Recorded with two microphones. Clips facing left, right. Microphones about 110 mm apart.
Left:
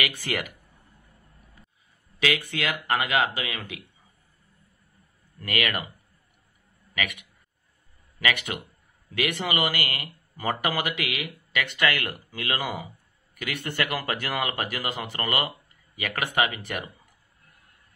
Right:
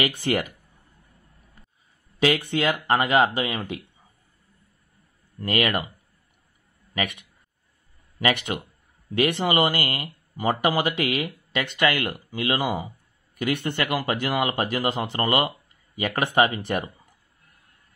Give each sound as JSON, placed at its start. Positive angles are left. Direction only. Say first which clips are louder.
{"t": 0.0, "sound": "speech", "louder": "right 6 dB", "side_deg": -30}
{"t": 2.1, "sound": "speech", "louder": "right 5 dB", "side_deg": -30}
{"t": 5.4, "sound": "speech", "louder": "right 5 dB", "side_deg": -30}
{"t": 6.9, "sound": "speech", "louder": "right 3 dB", "side_deg": -30}